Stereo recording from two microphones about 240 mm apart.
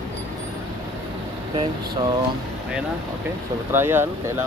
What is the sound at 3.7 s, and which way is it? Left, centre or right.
Speech, centre.